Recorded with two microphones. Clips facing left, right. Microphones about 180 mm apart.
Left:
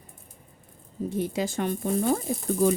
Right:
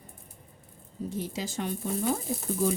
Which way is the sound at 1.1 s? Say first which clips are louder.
Left 6 dB; 60° left (ahead or behind).